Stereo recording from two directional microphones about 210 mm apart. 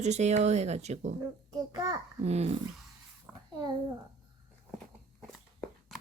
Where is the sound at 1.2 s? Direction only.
15° right (ahead or behind).